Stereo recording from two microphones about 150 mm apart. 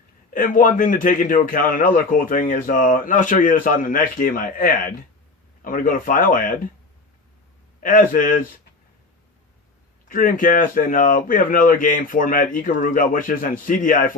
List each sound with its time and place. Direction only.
0.3 s a man's voice: 70° left (ahead or behind)
7.8 s a man's voice: 65° left (ahead or behind)
10.1 s a man's voice: 65° left (ahead or behind)